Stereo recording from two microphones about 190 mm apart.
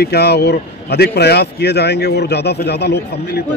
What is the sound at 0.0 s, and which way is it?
Speech, 60° left (ahead or behind).